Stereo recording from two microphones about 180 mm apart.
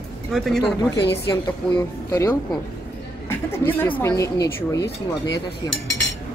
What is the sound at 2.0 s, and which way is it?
Speech, 15° left (ahead or behind).